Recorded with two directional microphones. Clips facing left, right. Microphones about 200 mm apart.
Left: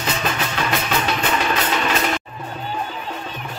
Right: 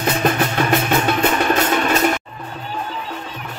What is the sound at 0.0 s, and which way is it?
Music, 55° right (ahead or behind).